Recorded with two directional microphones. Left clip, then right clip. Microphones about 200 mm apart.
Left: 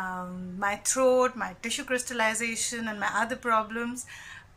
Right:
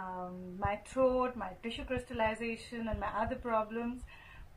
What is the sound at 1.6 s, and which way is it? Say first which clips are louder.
A woman's voice: left 11 dB; 10° left (ahead or behind).